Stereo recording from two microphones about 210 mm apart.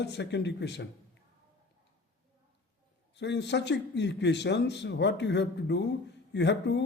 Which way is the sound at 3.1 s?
55° left (ahead or behind).